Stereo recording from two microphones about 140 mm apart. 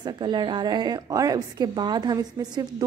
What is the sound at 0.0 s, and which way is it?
A woman's voice, 30° right (ahead or behind).